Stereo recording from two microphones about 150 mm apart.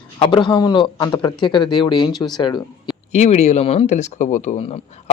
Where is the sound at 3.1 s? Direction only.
45° left (ahead or behind).